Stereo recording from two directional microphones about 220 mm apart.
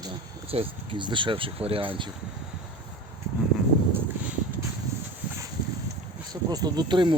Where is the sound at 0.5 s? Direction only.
25° right (ahead or behind).